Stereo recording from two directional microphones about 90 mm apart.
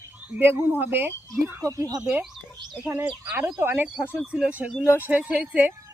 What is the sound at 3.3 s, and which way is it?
A woman's voice, 20° right (ahead or behind).